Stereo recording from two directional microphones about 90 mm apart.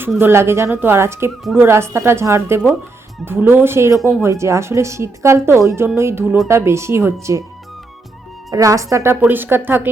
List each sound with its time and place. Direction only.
0.2 s speech: 25° right (ahead or behind)
8.4 s speech: 40° right (ahead or behind)
9.2 s speech: 25° right (ahead or behind)